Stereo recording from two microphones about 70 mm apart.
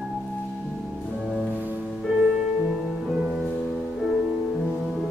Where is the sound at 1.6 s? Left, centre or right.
Right.